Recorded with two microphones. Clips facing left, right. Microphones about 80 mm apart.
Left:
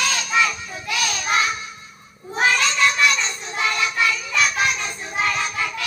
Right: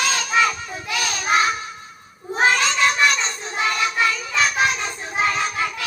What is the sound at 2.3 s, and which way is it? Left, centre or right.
Cat, right.